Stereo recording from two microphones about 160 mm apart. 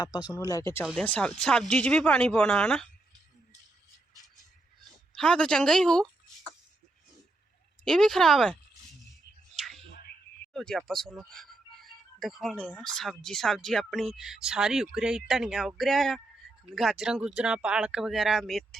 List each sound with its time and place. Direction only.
0.0 s speech: 25° left (ahead or behind); by 2.8 s 5° left (ahead or behind)
5.1 s speech: 5° left (ahead or behind)
7.9 s speech: 5° left (ahead or behind)
9.6 s a sound: centre (ahead or behind)
10.5 s speech: 5° left (ahead or behind)